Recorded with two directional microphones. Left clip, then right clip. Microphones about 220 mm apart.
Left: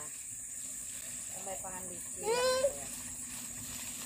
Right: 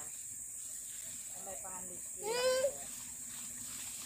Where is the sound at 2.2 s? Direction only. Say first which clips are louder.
Left 3 dB; centre (ahead or behind).